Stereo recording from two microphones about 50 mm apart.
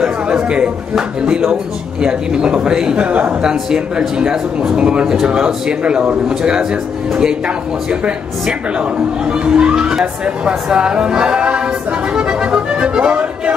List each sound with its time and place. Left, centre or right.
0.3 s speech: right
3.1 s speech: right
3.4 s speech: centre